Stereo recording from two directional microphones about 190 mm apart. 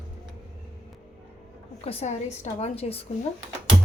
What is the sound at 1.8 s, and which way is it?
A woman's voice, 35° left (ahead or behind).